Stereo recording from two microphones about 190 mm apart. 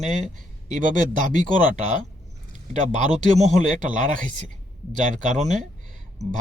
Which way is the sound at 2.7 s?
40° right (ahead or behind).